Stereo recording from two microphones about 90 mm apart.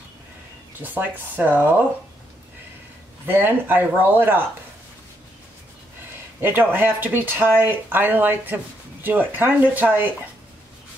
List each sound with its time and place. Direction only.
0.7 s speech: 20° right (ahead or behind)
3.3 s speech: 20° right (ahead or behind)
6.4 s speech: 20° right (ahead or behind)